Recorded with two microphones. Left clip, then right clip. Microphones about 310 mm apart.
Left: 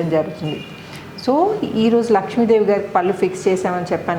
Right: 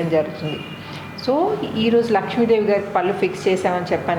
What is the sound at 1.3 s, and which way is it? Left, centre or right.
A woman's voice, left.